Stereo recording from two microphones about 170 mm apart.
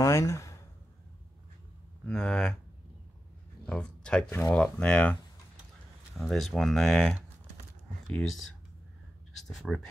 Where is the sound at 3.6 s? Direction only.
5° left (ahead or behind).